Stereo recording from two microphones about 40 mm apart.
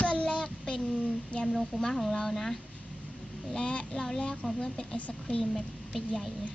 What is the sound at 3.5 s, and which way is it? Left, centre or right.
Child singing, left.